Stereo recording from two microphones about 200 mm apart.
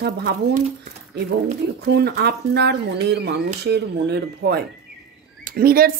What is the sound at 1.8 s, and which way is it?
Speech, 55° right (ahead or behind).